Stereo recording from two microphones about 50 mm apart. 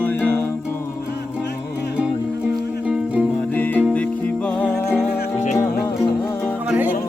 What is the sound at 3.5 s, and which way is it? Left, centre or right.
Music, left.